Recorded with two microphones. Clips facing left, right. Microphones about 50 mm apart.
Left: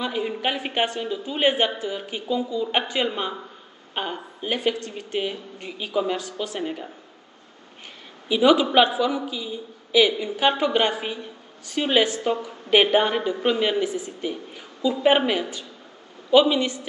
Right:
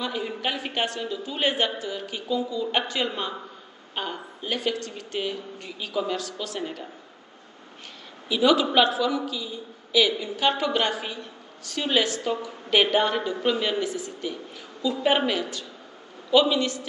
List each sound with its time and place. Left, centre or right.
0.0 s a woman's voice: centre
3.9 s a woman's voice: centre
8.3 s a woman's voice: centre